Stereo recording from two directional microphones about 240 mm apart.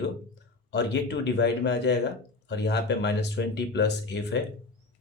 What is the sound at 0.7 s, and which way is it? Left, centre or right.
Speech, left.